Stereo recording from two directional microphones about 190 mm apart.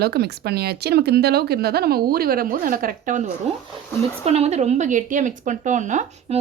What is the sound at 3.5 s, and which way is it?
Speech, 35° right (ahead or behind).